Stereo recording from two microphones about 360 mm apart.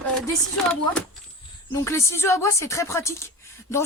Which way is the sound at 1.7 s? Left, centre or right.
Centre.